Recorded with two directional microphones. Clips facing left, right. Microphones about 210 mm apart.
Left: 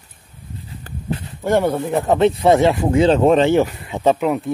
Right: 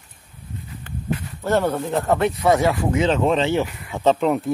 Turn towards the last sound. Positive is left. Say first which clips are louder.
# left 1 dB
turn(degrees=10)  # may be behind; listen again after turning